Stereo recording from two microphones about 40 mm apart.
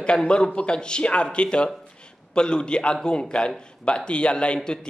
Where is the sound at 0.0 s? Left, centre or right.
Left.